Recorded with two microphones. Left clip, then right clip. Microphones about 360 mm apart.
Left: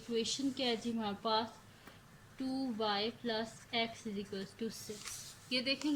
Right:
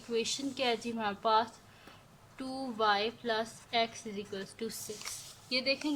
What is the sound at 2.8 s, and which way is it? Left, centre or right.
A woman's voice, centre.